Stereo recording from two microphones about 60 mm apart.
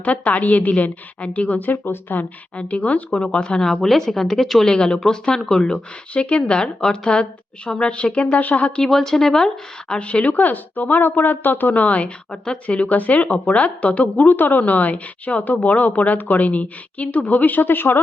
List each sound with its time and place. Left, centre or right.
0.0 s a woman's voice: left
8.8 s a woman's voice: centre
10.0 s speech: left